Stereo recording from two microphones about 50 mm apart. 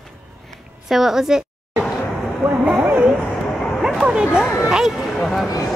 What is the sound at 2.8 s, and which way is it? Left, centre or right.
Speech, right.